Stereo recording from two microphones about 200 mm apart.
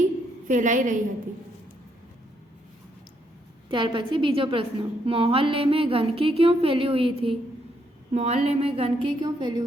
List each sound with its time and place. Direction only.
0.4 s a woman's voice: 40° right (ahead or behind)
3.7 s a woman's voice: 25° right (ahead or behind)